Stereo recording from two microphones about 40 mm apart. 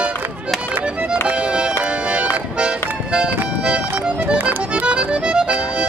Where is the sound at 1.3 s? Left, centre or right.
Right.